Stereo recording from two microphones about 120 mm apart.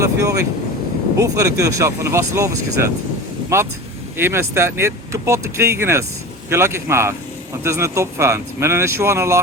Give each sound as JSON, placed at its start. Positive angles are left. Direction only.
{"t": 0.0, "sound": "speech", "side_deg": -25}